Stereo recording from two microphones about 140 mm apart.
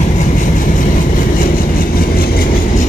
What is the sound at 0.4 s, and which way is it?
Vehicle, 70° left (ahead or behind).